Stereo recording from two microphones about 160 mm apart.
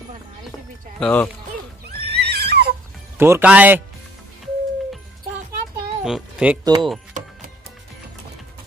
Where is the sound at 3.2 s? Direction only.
10° right (ahead or behind).